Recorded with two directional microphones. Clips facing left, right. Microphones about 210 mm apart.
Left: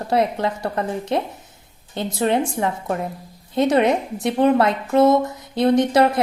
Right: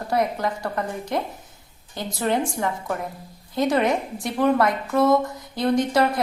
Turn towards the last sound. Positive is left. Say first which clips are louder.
# left 4 dB
turn(degrees=20)  # may be behind; listen again after turning